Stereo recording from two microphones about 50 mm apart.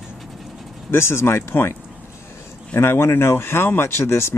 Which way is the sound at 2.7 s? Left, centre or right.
Left.